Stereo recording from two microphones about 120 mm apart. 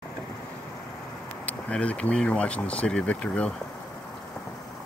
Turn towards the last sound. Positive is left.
turn(degrees=10)  # may be behind; listen again after turning